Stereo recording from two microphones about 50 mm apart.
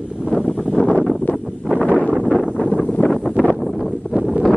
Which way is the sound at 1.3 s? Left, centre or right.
Centre.